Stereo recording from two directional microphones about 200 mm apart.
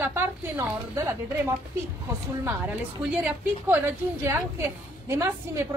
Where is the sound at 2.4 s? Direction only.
10° right (ahead or behind).